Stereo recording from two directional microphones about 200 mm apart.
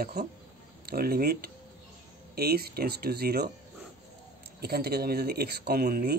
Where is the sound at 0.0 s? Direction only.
50° right (ahead or behind).